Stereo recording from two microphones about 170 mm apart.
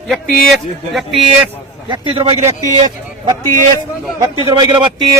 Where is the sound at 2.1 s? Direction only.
30° right (ahead or behind).